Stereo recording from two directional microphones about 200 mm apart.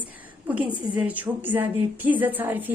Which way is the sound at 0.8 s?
10° right (ahead or behind).